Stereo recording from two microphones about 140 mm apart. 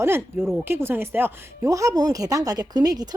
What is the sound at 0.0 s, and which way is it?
Speech, 15° right (ahead or behind).